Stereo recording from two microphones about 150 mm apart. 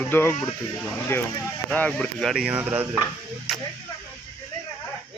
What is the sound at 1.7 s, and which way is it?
Speech, 10° left (ahead or behind).